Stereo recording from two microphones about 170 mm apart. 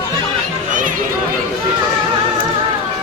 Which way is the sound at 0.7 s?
50° right (ahead or behind).